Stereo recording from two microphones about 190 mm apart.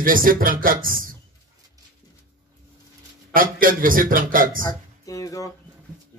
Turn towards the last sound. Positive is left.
turn(degrees=15)  # may be behind; listen again after turning